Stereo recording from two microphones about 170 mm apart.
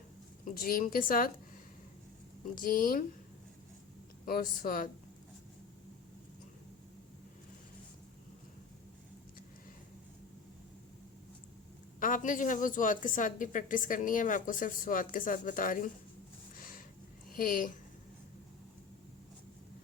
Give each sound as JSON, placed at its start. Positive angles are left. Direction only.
{"t": 0.5, "sound": "a woman's voice", "side_deg": 60}
{"t": 2.6, "sound": "a woman's voice", "side_deg": 55}
{"t": 4.3, "sound": "a woman's voice", "side_deg": 55}
{"t": 11.9, "sound": "a woman's voice", "side_deg": 50}
{"t": 16.6, "sound": "a sound", "side_deg": 55}
{"t": 17.3, "sound": "a woman's voice", "side_deg": 55}